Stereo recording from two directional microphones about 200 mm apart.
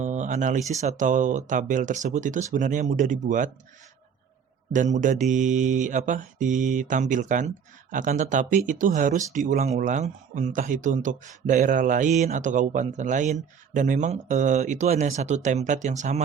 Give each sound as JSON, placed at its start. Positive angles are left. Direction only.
{"t": 0.0, "sound": "a sound", "side_deg": -35}
{"t": 0.7, "sound": "speech", "side_deg": -35}
{"t": 4.7, "sound": "speech", "side_deg": -40}